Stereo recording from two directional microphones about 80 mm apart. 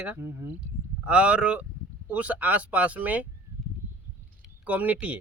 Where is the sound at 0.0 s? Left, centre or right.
Centre.